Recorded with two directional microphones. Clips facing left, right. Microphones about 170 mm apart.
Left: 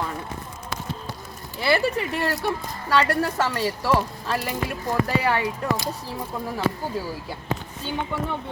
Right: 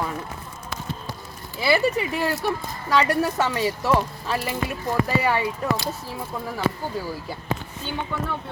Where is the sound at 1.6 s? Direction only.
5° right (ahead or behind).